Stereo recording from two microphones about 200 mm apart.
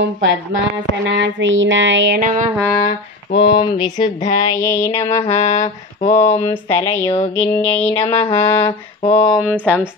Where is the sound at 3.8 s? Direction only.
20° left (ahead or behind).